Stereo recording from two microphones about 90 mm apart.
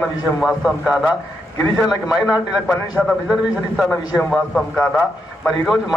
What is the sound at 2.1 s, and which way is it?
Speech, 45° left (ahead or behind).